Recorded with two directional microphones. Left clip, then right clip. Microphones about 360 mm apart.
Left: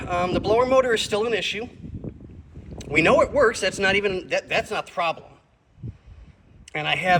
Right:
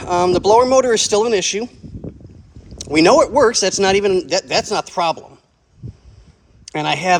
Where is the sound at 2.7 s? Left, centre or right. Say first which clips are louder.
Right 6 dB; centre.